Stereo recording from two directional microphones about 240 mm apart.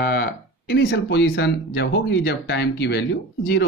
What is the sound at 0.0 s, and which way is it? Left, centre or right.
Speech, left.